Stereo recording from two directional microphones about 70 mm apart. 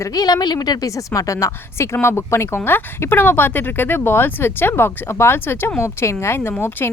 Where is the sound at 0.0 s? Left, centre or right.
Left.